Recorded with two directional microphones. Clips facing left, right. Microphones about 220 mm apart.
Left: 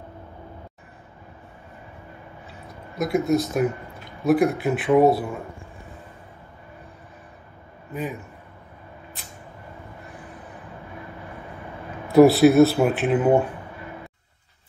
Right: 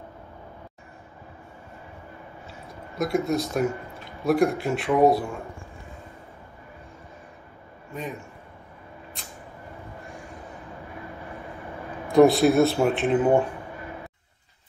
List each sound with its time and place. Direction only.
3.0 s a man's voice: centre (ahead or behind)
7.9 s a man's voice: 5° left (ahead or behind)
12.1 s a man's voice: centre (ahead or behind)